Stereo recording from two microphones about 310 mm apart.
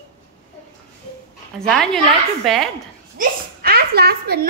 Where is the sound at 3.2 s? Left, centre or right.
Right.